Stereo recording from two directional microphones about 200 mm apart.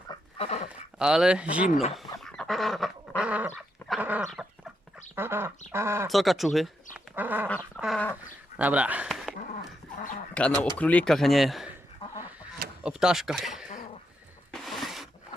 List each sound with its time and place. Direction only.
0.1 s dog: 30° left (ahead or behind)
0.7 s speech: 5° right (ahead or behind)
2.2 s goat: 5° left (ahead or behind)
5.1 s duck: 10° right (ahead or behind)
5.7 s speech: 10° right (ahead or behind)
6.1 s speech: centre (ahead or behind)
7.2 s goat: 10° right (ahead or behind)
7.8 s duck: centre (ahead or behind)
8.5 s a sound: 5° right (ahead or behind)
10.3 s speech: 5° left (ahead or behind)
12.8 s a sound: 5° right (ahead or behind)